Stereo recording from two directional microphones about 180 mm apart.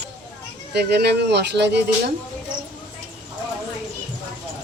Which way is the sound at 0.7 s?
65° right (ahead or behind).